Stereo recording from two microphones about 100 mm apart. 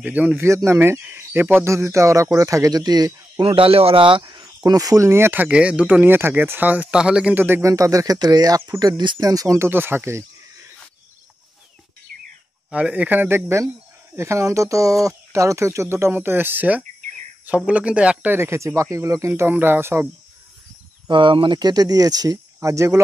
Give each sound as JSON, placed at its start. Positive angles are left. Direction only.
{"t": 0.0, "sound": "speech", "side_deg": -15}
{"t": 3.4, "sound": "speech", "side_deg": -65}
{"t": 7.4, "sound": "speech", "side_deg": -20}
{"t": 7.7, "sound": "speech", "side_deg": -35}
{"t": 9.2, "sound": "speech", "side_deg": -35}
{"t": 12.7, "sound": "speech", "side_deg": -15}
{"t": 21.1, "sound": "speech", "side_deg": -55}